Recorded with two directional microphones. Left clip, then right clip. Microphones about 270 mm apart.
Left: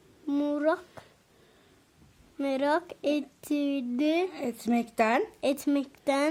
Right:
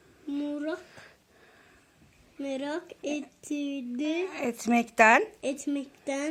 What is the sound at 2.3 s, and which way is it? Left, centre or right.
Speech, left.